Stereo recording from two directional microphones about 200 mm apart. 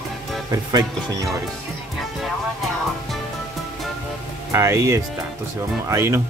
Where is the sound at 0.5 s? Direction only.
20° right (ahead or behind).